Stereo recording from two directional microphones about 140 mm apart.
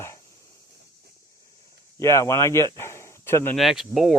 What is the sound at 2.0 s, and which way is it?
Speech, 20° left (ahead or behind).